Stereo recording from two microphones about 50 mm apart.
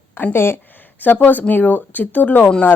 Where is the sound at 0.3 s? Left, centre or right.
Left.